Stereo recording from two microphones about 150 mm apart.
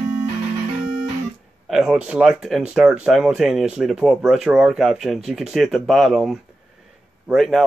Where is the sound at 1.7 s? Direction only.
5° right (ahead or behind).